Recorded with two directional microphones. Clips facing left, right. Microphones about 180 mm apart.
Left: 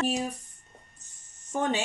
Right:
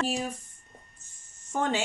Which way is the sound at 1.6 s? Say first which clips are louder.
Even; 20° left (ahead or behind).